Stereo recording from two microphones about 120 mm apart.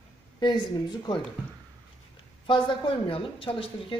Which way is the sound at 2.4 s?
45° left (ahead or behind).